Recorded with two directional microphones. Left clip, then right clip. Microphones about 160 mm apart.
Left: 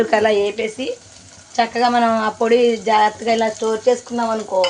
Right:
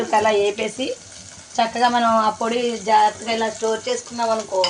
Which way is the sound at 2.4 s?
45° left (ahead or behind).